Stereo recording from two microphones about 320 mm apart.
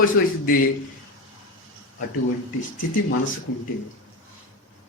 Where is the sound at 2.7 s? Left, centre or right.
Left.